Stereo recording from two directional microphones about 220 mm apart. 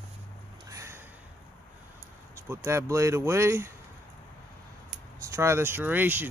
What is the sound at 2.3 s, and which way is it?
Speech, 10° right (ahead or behind).